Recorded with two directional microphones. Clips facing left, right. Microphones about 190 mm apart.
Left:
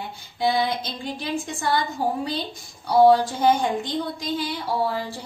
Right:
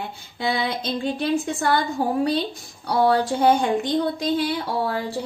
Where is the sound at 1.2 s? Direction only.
60° right (ahead or behind).